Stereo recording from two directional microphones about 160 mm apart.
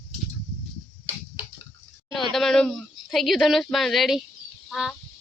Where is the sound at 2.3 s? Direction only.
5° left (ahead or behind).